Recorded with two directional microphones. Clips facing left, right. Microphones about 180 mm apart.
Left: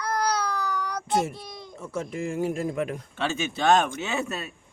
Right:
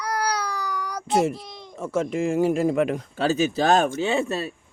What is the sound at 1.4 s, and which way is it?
Baby cry, centre (ahead or behind).